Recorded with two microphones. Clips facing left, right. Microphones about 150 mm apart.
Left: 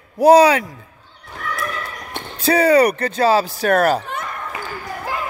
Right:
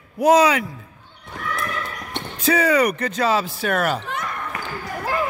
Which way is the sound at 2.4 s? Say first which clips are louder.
Left 4 dB; 35° left (ahead or behind).